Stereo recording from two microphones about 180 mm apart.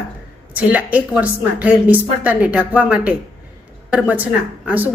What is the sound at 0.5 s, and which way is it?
A woman's voice, 10° right (ahead or behind).